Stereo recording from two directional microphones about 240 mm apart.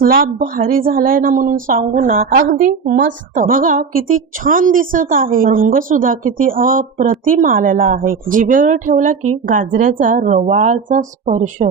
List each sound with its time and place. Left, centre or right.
0.0 s a woman's voice: right